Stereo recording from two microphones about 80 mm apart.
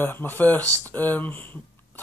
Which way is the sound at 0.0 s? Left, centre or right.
Left.